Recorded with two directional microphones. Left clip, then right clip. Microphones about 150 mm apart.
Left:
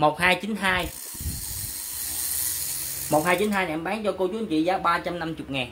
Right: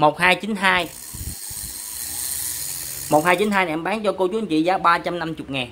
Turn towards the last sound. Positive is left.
turn(degrees=-35)  # may be behind; listen again after turning